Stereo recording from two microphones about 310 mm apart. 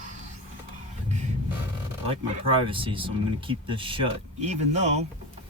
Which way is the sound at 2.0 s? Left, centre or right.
Centre.